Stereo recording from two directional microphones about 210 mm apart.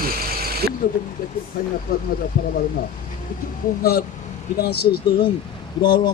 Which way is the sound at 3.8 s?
45° left (ahead or behind).